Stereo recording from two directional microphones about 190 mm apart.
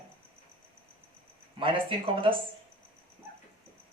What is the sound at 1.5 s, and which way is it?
Speech, 25° right (ahead or behind).